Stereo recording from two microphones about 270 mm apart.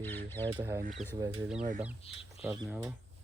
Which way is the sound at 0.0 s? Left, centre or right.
Centre.